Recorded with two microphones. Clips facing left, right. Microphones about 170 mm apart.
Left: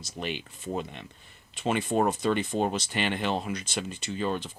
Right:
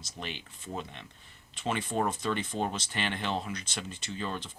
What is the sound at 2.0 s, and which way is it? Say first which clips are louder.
Speech: left 5 dB; 40° left (ahead or behind).